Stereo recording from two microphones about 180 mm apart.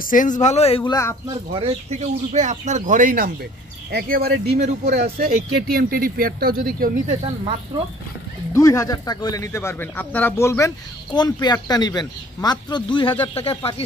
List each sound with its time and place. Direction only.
0.0 s speech: 50° left (ahead or behind); by 0.9 s 30° left (ahead or behind)
1.5 s speech: 35° right (ahead or behind); by 3.3 s 50° right (ahead or behind)
3.9 s speech: 60° right (ahead or behind)
8.5 s speech: 15° left (ahead or behind)